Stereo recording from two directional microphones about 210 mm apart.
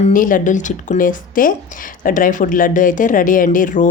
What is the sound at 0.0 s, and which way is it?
Speech, 40° left (ahead or behind).